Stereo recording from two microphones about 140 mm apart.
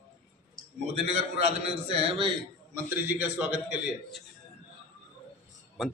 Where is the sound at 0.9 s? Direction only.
50° right (ahead or behind).